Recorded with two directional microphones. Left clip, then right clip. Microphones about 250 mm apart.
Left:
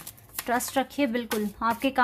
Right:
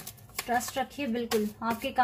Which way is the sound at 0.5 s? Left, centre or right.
Left.